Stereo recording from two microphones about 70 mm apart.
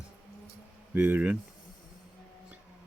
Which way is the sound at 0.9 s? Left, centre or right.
Right.